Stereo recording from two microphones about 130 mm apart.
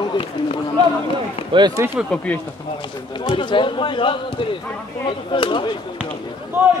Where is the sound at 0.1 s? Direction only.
45° left (ahead or behind).